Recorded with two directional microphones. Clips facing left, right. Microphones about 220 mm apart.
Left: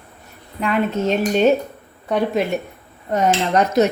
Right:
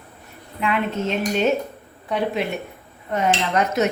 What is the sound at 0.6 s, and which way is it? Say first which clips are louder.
Cutlery: left 3 dB; 40° left (ahead or behind).